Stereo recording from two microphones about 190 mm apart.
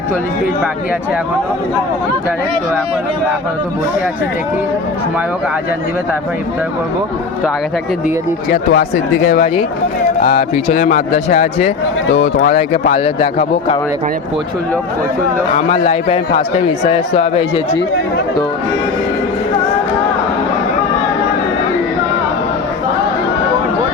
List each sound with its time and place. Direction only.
8.0 s speech: 50° left (ahead or behind)
12.5 s speech: 40° left (ahead or behind)
15.5 s speech: 35° left (ahead or behind)